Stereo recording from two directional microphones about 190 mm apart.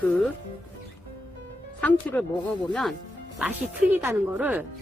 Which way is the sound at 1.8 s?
10° left (ahead or behind).